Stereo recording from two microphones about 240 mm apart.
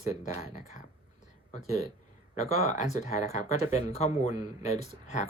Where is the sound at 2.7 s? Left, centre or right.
Left.